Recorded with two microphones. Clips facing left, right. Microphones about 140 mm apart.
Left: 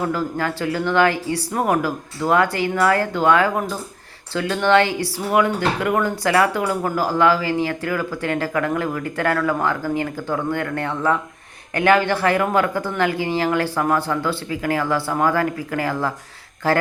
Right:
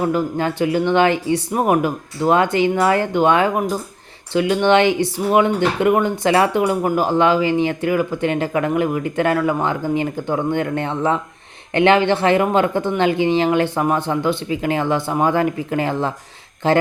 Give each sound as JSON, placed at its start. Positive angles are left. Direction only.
{"t": 0.0, "sound": "speech", "side_deg": -20}